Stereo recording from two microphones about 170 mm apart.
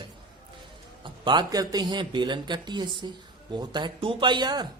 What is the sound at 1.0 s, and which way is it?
Speech, 25° right (ahead or behind).